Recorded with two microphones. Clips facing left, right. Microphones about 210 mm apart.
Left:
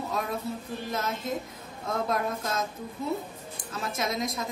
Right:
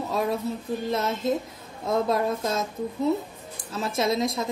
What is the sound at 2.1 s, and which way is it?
Speech, 25° right (ahead or behind).